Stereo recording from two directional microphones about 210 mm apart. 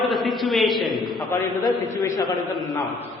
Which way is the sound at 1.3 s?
15° left (ahead or behind).